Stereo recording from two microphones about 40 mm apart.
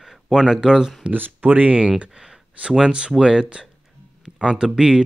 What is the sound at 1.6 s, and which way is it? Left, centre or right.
Speech, right.